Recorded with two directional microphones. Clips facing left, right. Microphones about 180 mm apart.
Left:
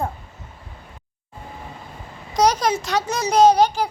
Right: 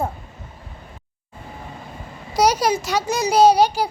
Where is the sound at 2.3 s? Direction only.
10° right (ahead or behind).